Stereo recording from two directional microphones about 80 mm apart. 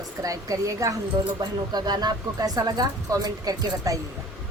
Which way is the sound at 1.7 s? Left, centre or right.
Right.